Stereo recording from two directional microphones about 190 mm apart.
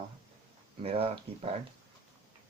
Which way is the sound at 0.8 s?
30° right (ahead or behind).